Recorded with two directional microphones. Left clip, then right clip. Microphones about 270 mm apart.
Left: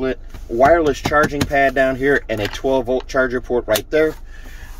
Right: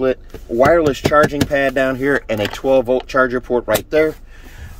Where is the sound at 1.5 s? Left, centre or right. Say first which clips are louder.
Left 1 dB; centre.